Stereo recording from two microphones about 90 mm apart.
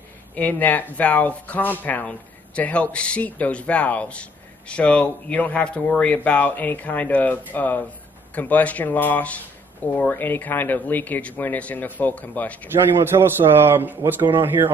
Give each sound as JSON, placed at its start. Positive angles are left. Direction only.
{"t": 0.4, "sound": "speech", "side_deg": 20}
{"t": 12.6, "sound": "a man's voice", "side_deg": -25}